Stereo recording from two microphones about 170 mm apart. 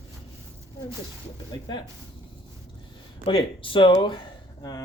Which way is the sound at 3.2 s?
30° left (ahead or behind).